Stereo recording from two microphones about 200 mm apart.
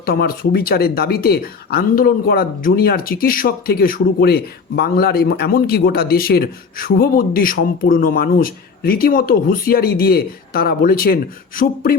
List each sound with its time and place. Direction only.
0.0 s speech: 50° left (ahead or behind)